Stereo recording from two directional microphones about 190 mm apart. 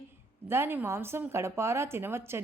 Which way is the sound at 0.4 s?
10° right (ahead or behind).